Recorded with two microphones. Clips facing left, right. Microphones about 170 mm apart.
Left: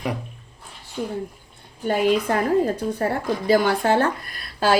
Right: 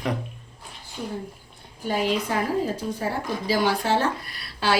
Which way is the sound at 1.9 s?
55° left (ahead or behind).